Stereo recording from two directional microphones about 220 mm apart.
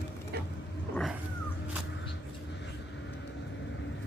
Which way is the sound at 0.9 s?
Centre (ahead or behind).